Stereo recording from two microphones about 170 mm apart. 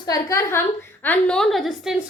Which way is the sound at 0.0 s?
20° left (ahead or behind).